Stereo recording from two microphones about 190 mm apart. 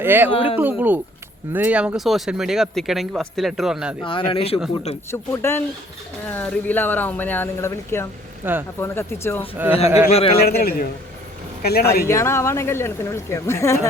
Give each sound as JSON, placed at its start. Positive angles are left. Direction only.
{"t": 0.0, "sound": "speech", "side_deg": -10}
{"t": 4.0, "sound": "speech", "side_deg": 25}
{"t": 5.3, "sound": "speech", "side_deg": 10}
{"t": 8.4, "sound": "speech", "side_deg": -10}
{"t": 8.8, "sound": "speech", "side_deg": 15}
{"t": 9.6, "sound": "speech", "side_deg": -10}
{"t": 10.1, "sound": "speech", "side_deg": 30}
{"t": 10.6, "sound": "a man's voice", "side_deg": 50}
{"t": 12.0, "sound": "speech", "side_deg": 15}